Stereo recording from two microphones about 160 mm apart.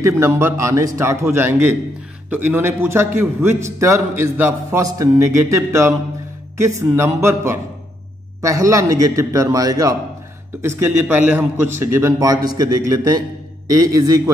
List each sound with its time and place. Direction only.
0.0 s a man's voice: 15° right (ahead or behind)